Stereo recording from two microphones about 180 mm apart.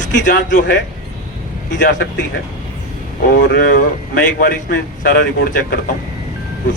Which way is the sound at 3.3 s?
55° left (ahead or behind).